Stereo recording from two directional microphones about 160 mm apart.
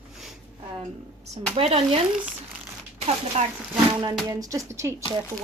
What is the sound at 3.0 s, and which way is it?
Speech, 40° right (ahead or behind).